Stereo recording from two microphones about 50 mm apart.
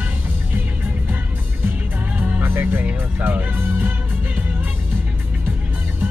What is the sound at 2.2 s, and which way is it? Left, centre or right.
Music, right.